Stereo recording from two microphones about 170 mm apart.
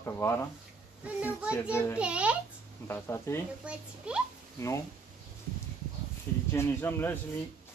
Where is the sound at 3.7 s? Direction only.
5° right (ahead or behind).